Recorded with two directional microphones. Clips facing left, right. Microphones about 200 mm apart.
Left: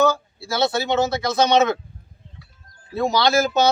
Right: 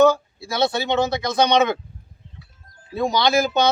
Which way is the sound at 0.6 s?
20° right (ahead or behind).